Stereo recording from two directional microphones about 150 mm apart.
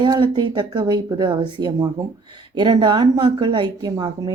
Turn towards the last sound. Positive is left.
turn(degrees=-25)  # may be behind; listen again after turning